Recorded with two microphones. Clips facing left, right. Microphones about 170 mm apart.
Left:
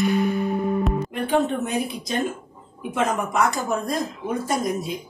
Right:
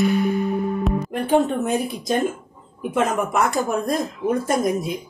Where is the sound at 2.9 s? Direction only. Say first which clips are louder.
Right 2 dB; 50° right (ahead or behind).